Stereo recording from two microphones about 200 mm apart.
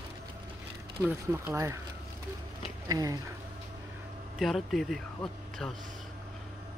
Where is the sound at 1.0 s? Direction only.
15° right (ahead or behind).